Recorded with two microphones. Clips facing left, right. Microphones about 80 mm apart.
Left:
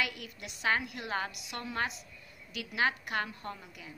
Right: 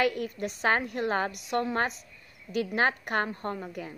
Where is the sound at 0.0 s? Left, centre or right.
Right.